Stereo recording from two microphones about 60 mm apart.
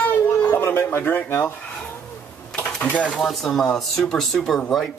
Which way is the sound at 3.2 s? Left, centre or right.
Centre.